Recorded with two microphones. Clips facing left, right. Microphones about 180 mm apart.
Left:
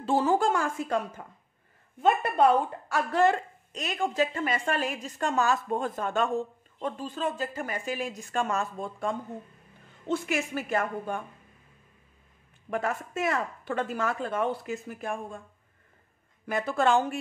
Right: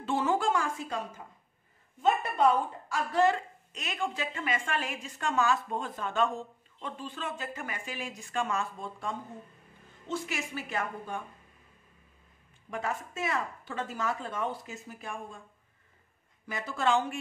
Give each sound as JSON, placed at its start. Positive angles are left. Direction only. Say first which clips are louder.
{"t": 0.0, "sound": "a woman's voice", "louder": "left 4 dB", "side_deg": 35}
{"t": 3.7, "sound": "a woman's voice", "louder": "left 6 dB", "side_deg": 40}
{"t": 12.7, "sound": "speech", "louder": "left 5 dB", "side_deg": 55}
{"t": 16.4, "sound": "speech", "louder": "left 5 dB", "side_deg": 55}